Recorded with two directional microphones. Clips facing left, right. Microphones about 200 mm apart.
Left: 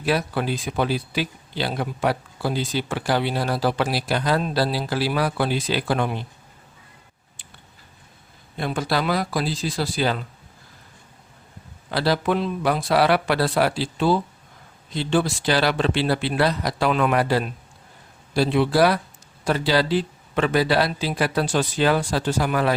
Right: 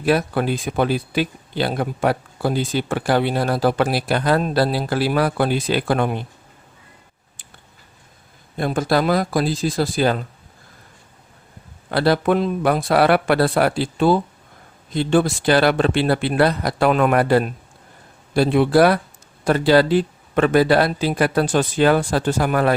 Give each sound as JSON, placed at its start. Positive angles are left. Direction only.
{"t": 0.0, "sound": "speech", "side_deg": -50}
{"t": 8.5, "sound": "speech", "side_deg": -45}
{"t": 11.9, "sound": "speech", "side_deg": -55}